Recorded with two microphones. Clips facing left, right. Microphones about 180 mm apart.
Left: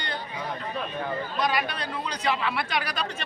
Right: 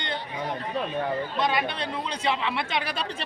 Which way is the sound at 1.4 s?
25° right (ahead or behind).